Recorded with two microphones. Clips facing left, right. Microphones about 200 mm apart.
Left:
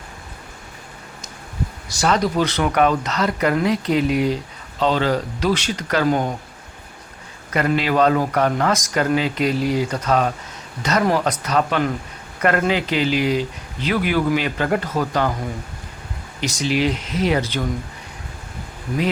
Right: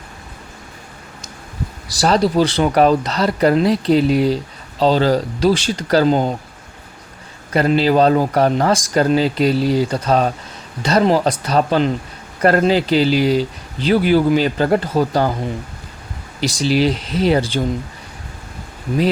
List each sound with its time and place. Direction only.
1.9 s speech: 35° right (ahead or behind)
7.5 s speech: 30° right (ahead or behind)
16.4 s speech: 35° right (ahead or behind)